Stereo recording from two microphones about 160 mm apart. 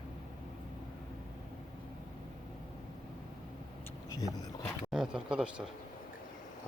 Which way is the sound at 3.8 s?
20° left (ahead or behind).